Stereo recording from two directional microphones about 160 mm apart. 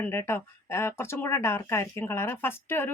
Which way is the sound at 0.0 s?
15° left (ahead or behind).